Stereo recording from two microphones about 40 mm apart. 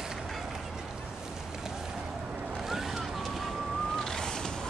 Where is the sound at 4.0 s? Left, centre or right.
Centre.